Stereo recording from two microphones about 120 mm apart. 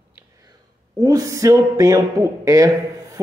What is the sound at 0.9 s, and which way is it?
Speech, 30° right (ahead or behind).